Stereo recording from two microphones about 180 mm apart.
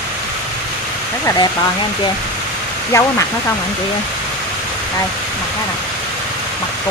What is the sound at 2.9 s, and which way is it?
Speech, 15° left (ahead or behind).